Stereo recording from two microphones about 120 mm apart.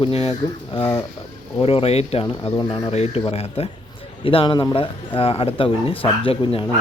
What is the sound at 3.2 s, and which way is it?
Speech, 55° left (ahead or behind).